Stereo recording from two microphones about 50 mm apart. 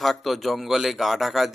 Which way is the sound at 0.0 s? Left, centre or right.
Centre.